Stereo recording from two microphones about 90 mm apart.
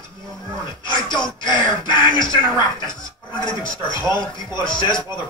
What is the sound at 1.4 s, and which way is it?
Speech, 60° left (ahead or behind).